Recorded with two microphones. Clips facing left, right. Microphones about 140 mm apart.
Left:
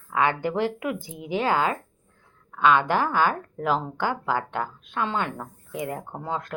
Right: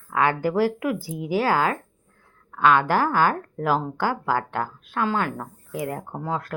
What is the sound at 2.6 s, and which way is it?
Speech, 20° left (ahead or behind).